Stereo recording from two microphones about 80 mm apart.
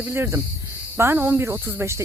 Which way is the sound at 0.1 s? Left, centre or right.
Right.